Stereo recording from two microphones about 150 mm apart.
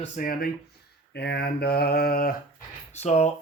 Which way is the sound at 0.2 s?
75° left (ahead or behind).